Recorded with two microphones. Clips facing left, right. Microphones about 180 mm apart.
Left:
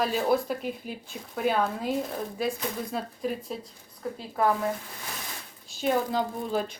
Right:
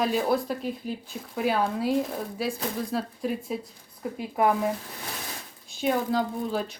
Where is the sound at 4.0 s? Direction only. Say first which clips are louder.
Right 2 dB; 15° right (ahead or behind).